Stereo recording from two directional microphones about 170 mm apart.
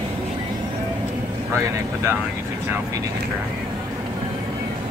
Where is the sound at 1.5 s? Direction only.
15° right (ahead or behind).